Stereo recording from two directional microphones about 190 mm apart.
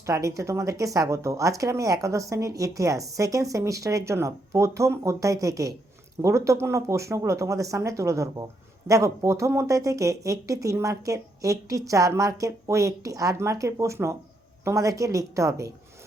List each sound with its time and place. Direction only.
0.0 s speech: 15° right (ahead or behind)